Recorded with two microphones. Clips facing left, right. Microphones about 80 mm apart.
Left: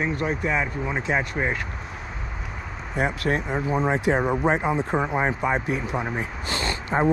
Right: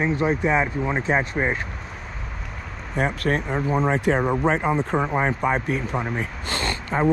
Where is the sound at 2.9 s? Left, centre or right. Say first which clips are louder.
Right 1 dB; right.